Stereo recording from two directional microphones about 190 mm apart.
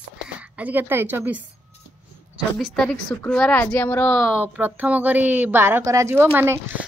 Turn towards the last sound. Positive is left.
turn(degrees=-10)  # may be behind; listen again after turning